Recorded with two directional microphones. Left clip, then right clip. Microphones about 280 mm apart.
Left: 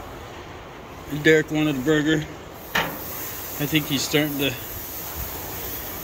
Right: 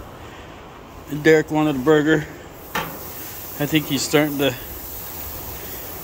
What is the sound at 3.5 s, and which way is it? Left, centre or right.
Speech, centre.